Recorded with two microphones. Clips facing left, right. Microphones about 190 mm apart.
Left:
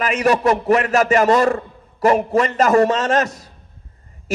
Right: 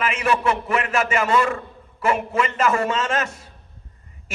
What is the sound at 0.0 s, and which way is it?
A man's voice, 40° left (ahead or behind).